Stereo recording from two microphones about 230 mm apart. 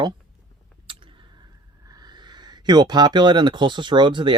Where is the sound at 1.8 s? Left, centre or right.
Centre.